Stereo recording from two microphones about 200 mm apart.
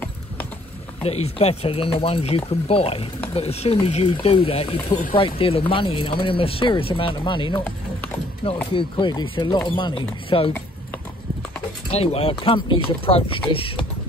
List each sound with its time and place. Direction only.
1.0 s speech: 30° left (ahead or behind)
11.9 s speech: 30° left (ahead or behind)